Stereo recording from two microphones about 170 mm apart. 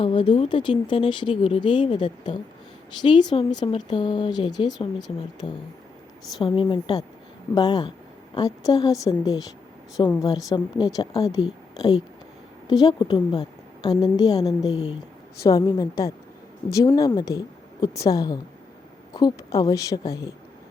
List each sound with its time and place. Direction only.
0.0 s speech: 30° left (ahead or behind)
6.4 s a woman's voice: 30° left (ahead or behind)